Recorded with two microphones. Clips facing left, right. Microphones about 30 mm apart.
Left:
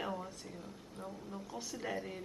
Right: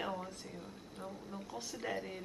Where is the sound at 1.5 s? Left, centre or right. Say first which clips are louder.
Even; centre.